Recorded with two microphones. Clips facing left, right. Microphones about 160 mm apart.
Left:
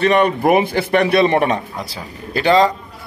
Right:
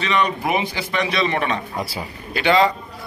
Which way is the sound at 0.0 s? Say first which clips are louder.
Left 7 dB; 55° left (ahead or behind).